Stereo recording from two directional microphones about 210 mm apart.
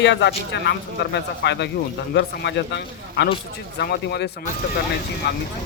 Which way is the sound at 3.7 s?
50° left (ahead or behind).